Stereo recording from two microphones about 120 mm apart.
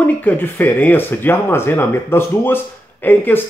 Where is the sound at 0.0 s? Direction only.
15° left (ahead or behind).